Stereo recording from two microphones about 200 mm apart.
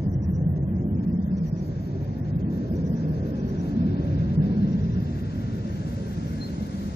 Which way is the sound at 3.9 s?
55° left (ahead or behind).